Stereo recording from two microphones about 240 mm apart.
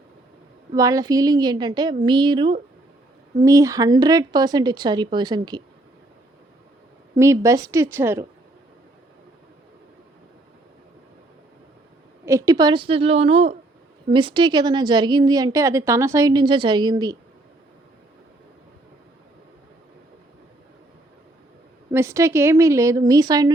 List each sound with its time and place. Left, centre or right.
0.7 s a woman's voice: centre
7.2 s a woman's voice: centre
12.2 s a woman's voice: centre
21.9 s a woman's voice: centre